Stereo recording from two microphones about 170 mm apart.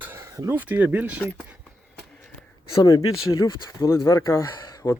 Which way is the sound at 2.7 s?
20° left (ahead or behind).